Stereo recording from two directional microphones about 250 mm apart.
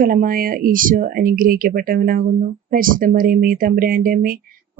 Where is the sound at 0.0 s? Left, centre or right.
Right.